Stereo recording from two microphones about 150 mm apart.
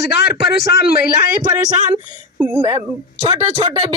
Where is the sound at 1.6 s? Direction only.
55° right (ahead or behind).